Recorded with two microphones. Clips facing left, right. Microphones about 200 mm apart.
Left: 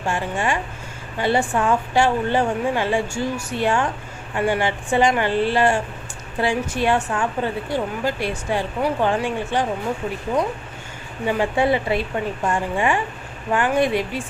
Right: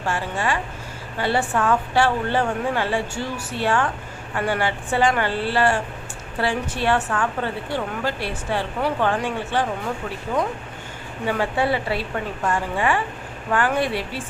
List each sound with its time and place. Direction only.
0.0 s a woman's voice: 15° left (ahead or behind)
11.3 s a woman's voice: 15° left (ahead or behind)